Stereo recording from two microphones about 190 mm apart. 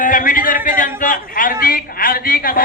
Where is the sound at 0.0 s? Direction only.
45° left (ahead or behind).